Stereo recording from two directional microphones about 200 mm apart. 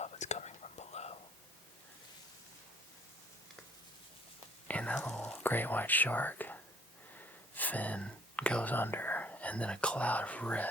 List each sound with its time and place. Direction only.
0.0 s whispering: 35° left (ahead or behind)
4.7 s whispering: 5° left (ahead or behind)
7.2 s speech: 10° left (ahead or behind)